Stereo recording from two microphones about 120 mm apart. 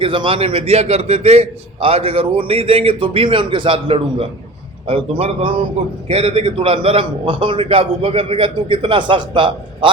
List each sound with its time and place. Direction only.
0.0 s a man's voice: 45° right (ahead or behind)